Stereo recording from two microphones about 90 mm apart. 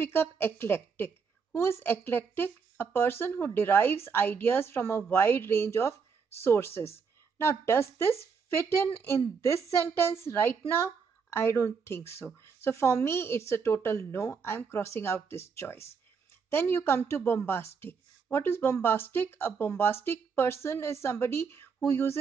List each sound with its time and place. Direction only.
0.0 s a woman's voice: 25° left (ahead or behind)